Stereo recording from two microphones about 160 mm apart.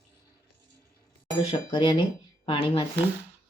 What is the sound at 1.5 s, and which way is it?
Speech, 30° left (ahead or behind).